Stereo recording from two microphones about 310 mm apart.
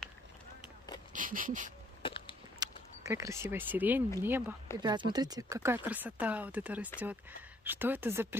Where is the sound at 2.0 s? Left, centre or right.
Centre.